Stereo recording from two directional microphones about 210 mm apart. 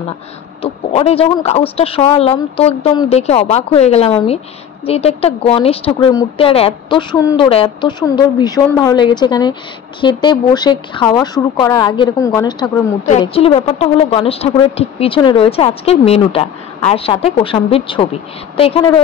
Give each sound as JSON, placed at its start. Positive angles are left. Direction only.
{"t": 0.6, "sound": "a woman's voice", "side_deg": 25}